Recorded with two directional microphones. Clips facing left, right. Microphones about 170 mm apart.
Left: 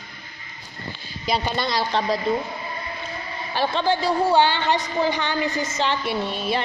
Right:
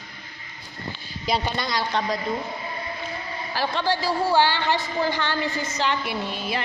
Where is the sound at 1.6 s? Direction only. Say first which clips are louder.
Left 3 dB; 25° left (ahead or behind).